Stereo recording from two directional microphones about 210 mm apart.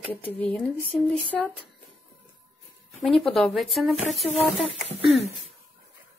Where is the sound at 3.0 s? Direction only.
Centre (ahead or behind).